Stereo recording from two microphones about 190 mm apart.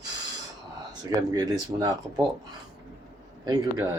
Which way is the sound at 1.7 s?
30° right (ahead or behind).